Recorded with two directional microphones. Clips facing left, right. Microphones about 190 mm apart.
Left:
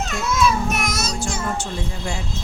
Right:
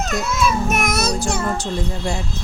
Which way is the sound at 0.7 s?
55° right (ahead or behind).